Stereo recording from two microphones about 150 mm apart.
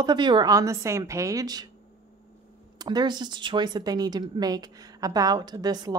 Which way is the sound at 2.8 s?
30° right (ahead or behind).